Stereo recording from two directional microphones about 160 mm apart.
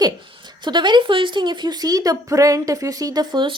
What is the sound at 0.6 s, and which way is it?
Speech, 30° right (ahead or behind).